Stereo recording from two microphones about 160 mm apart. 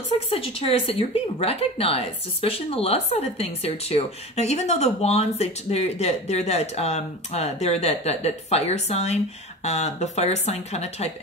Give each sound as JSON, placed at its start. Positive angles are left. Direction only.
{"t": 0.3, "sound": "speech", "side_deg": 35}